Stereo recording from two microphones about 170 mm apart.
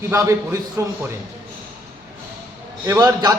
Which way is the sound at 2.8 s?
25° right (ahead or behind).